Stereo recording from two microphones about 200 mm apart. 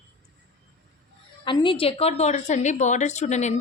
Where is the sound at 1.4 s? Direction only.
25° left (ahead or behind).